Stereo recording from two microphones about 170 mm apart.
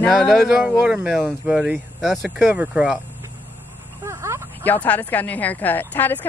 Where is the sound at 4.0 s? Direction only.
15° right (ahead or behind).